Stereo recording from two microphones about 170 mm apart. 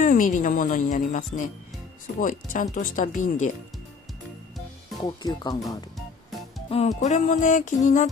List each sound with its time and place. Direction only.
0.0 s speech: 50° left (ahead or behind)
4.9 s speech: 25° left (ahead or behind)
7.0 s speech: 45° left (ahead or behind)